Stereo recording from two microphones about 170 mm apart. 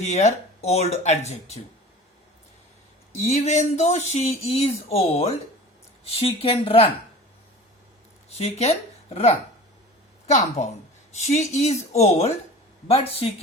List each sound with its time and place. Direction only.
0.0 s speech: 40° left (ahead or behind)
3.2 s speech: 40° left (ahead or behind)
8.3 s speech: 40° left (ahead or behind)
10.2 s a woman's voice: 45° left (ahead or behind)